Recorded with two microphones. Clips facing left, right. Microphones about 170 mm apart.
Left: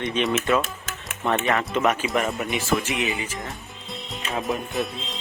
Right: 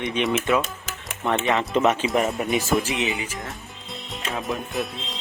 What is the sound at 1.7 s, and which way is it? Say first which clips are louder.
Speech: right 4 dB; 25° right (ahead or behind).